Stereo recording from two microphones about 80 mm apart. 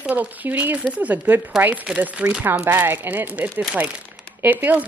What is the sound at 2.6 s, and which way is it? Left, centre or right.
A woman's voice, right.